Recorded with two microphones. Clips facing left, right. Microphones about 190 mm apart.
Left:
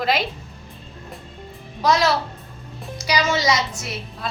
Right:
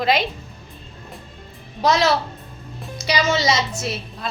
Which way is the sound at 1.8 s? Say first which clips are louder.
Right 1 dB; 25° right (ahead or behind).